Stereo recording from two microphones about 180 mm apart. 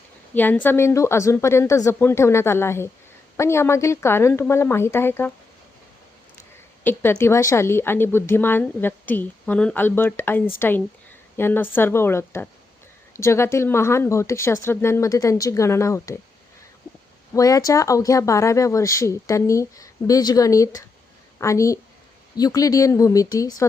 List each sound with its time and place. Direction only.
0.3 s a woman's voice: 10° left (ahead or behind)
6.8 s a woman's voice: 10° left (ahead or behind)
17.3 s a woman's voice: 20° left (ahead or behind)